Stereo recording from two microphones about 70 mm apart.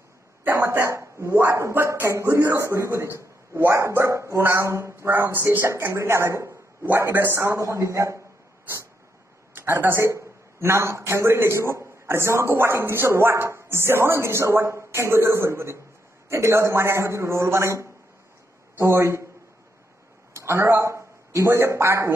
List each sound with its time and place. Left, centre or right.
0.6 s a man's voice: right
7.3 s a man's voice: right
9.5 s a man's voice: right
20.3 s a man's voice: right